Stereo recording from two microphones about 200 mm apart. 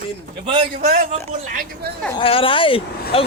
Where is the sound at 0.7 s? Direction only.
45° right (ahead or behind).